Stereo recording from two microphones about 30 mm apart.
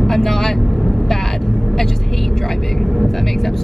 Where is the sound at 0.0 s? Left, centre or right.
Centre.